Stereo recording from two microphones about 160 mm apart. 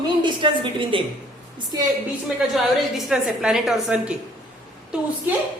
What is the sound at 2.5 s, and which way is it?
A woman's voice, centre (ahead or behind).